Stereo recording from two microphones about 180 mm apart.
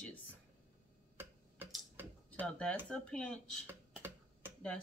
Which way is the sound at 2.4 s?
5° left (ahead or behind).